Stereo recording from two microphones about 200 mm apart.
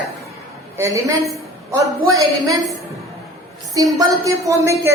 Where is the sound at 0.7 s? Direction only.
15° right (ahead or behind).